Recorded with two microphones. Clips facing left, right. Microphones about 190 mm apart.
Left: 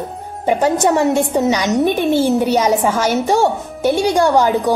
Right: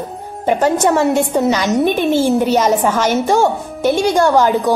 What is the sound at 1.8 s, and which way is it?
Speech, 15° right (ahead or behind).